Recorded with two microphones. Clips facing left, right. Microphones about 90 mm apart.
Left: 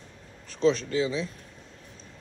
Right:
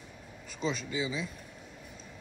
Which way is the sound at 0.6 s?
5° right (ahead or behind).